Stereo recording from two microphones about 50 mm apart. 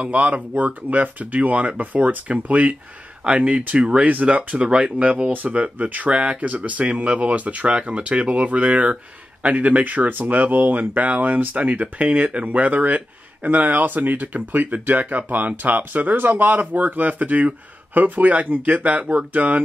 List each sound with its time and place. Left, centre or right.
0.0 s speech: right